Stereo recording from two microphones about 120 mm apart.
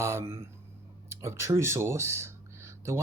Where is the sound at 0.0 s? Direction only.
20° right (ahead or behind).